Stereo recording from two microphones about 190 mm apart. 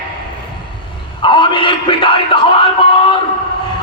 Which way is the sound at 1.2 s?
25° left (ahead or behind).